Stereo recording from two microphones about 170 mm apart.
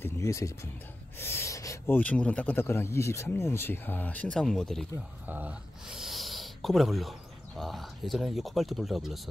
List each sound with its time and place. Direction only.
0.0 s a sound: 15° left (ahead or behind)
1.1 s speech: 15° left (ahead or behind)
5.2 s speech: 10° right (ahead or behind)